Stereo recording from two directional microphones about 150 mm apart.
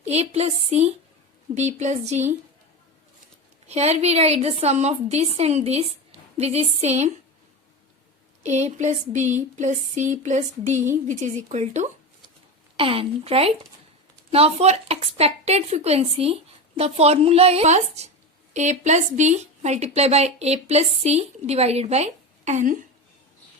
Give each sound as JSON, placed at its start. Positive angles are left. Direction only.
{"t": 0.0, "sound": "a woman's voice", "side_deg": -45}
{"t": 3.7, "sound": "a woman's voice", "side_deg": -45}
{"t": 8.4, "sound": "a woman's voice", "side_deg": -50}
{"t": 12.7, "sound": "a woman's voice", "side_deg": -35}